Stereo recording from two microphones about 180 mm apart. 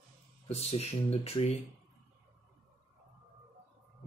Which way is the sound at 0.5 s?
35° left (ahead or behind).